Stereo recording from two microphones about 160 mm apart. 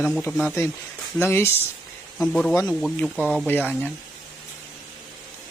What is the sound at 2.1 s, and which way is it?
Speech, 5° left (ahead or behind).